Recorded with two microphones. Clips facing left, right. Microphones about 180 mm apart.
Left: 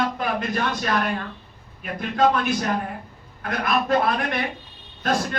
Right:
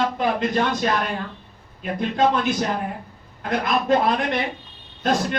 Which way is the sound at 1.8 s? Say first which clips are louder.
Right 1 dB; 25° right (ahead or behind).